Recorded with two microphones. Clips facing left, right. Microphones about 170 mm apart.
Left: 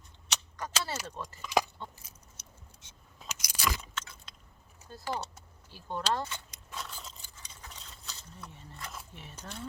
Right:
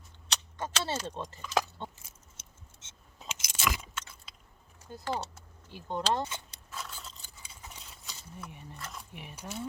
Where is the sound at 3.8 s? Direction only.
10° right (ahead or behind).